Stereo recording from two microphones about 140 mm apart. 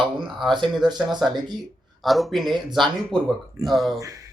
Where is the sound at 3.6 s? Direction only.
20° right (ahead or behind).